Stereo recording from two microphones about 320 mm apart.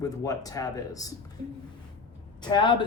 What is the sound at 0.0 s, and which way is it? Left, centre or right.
Speech, centre.